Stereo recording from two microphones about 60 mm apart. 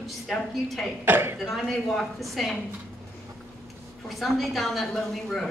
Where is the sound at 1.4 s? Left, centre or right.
Centre.